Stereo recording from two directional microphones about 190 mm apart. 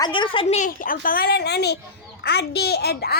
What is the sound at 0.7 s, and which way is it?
A child's voice, 45° left (ahead or behind).